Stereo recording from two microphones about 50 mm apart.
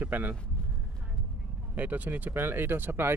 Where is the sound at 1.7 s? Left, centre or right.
Right.